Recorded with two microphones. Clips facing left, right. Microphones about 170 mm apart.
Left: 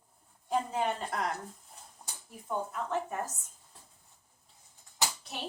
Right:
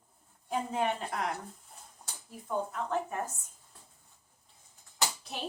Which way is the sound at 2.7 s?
5° left (ahead or behind).